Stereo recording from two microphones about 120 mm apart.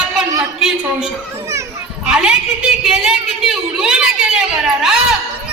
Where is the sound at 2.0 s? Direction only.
5° right (ahead or behind).